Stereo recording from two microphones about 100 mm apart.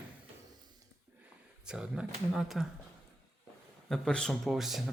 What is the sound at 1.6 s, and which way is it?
A man's voice, 10° right (ahead or behind).